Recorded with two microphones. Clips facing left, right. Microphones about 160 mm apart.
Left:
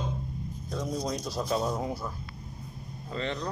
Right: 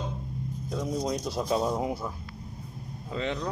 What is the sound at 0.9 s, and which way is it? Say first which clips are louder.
Speech: right 3 dB; 20° right (ahead or behind).